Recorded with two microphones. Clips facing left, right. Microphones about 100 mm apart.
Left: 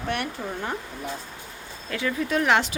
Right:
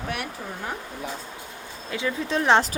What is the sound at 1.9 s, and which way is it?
Speech, 25° right (ahead or behind).